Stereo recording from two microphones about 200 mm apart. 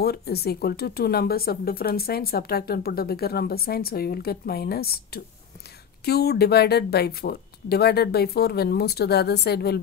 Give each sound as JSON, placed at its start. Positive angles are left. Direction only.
{"t": 0.0, "sound": "speech", "side_deg": 50}